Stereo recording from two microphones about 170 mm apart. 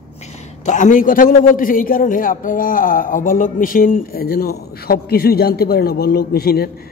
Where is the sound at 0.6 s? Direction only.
45° left (ahead or behind).